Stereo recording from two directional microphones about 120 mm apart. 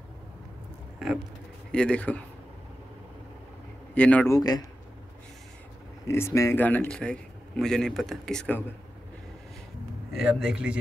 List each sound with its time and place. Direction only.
0.9 s vehicle: 5° right (ahead or behind)
1.7 s speech: 10° left (ahead or behind)
3.9 s speech: 10° left (ahead or behind)
4.3 s speech: 30° left (ahead or behind)
6.0 s a man's voice: 25° left (ahead or behind); by 8.5 s 5° left (ahead or behind)
10.1 s a man's voice: 5° right (ahead or behind)